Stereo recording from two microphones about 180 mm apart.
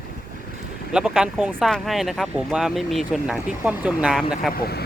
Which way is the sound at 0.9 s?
5° right (ahead or behind).